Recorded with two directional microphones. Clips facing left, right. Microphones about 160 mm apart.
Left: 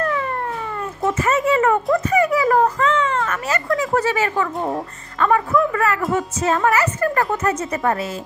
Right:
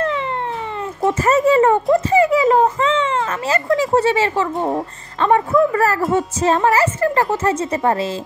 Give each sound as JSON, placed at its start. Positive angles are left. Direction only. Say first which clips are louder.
{"t": 0.0, "sound": "cat", "louder": "right 1 dB", "side_deg": -20}
{"t": 1.1, "sound": "speech", "louder": "right 5 dB", "side_deg": -35}